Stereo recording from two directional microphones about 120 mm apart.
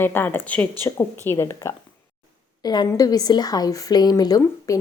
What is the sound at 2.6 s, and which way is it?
A woman's voice, 35° left (ahead or behind).